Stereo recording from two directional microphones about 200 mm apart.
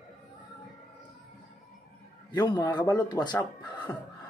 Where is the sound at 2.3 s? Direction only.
20° left (ahead or behind).